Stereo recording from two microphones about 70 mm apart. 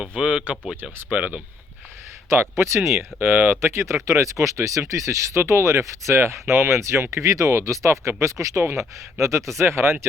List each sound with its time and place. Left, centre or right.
0.2 s speech: centre
2.3 s speech: right
3.2 s speech: right